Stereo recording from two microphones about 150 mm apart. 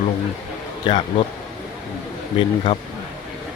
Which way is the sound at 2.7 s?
35° left (ahead or behind).